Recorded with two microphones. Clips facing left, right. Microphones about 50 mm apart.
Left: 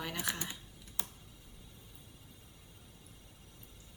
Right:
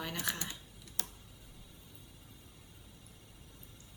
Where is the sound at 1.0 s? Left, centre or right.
Left.